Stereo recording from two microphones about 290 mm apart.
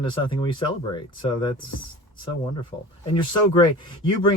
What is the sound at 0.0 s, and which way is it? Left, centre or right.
Speech, centre.